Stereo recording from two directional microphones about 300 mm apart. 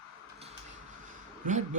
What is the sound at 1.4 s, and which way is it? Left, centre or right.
Speech, right.